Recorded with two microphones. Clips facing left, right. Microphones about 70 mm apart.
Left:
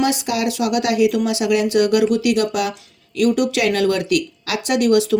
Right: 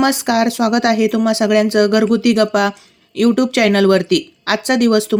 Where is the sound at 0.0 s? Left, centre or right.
Right.